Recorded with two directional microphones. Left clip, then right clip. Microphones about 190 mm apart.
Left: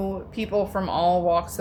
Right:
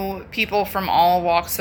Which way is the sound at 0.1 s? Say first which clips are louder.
Right 5 dB; 20° left (ahead or behind).